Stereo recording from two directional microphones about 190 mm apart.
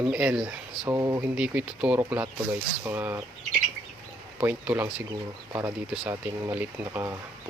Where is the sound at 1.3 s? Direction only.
5° right (ahead or behind).